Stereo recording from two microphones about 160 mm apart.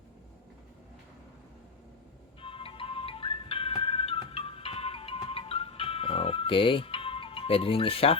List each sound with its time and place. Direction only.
2.4 s music: 35° left (ahead or behind)